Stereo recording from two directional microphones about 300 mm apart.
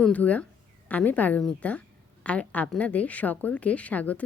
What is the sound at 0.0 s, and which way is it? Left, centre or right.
A woman's voice, centre.